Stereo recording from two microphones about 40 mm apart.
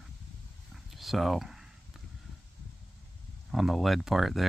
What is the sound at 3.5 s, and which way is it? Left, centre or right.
Speech, centre.